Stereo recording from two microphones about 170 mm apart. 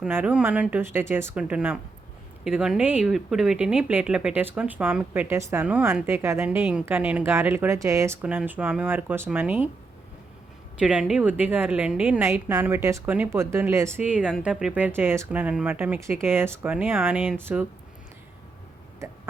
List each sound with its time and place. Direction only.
0.0 s speech: 10° right (ahead or behind)
10.8 s speech: 5° right (ahead or behind)
18.9 s a sound: 15° right (ahead or behind)